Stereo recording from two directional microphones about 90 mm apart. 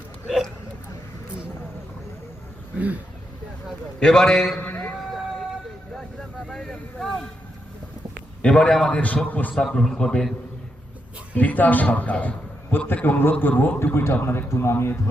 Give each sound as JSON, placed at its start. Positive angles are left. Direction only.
{"t": 4.0, "sound": "a man's voice", "side_deg": 5}
{"t": 4.6, "sound": "a sound", "side_deg": 20}
{"t": 4.9, "sound": "vehicle", "side_deg": 0}
{"t": 6.5, "sound": "speech", "side_deg": 5}
{"t": 8.4, "sound": "a man's voice", "side_deg": 10}
{"t": 9.6, "sound": "a man's voice", "side_deg": 5}
{"t": 11.3, "sound": "a man's voice", "side_deg": 20}